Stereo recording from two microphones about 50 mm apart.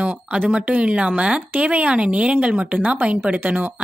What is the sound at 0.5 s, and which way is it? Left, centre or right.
A woman's voice, right.